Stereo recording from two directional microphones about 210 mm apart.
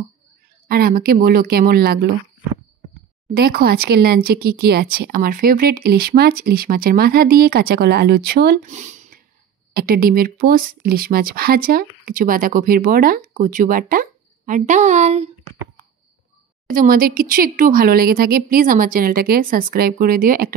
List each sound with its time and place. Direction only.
0.7 s speech: 45° right (ahead or behind)
3.3 s speech: 45° right (ahead or behind)
8.6 s a sound: 35° right (ahead or behind)
9.8 s speech: 45° right (ahead or behind)
16.6 s speech: 40° right (ahead or behind)